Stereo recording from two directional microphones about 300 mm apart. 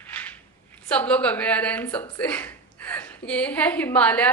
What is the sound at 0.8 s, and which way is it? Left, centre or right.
A woman's voice, centre.